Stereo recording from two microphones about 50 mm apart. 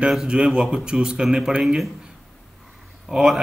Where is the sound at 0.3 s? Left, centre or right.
Centre.